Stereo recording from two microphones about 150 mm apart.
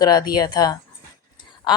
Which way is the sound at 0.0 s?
25° left (ahead or behind).